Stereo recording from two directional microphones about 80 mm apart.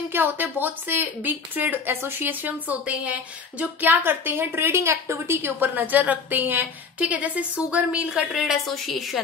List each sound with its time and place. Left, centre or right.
0.1 s a woman's voice: right; by 9.2 s centre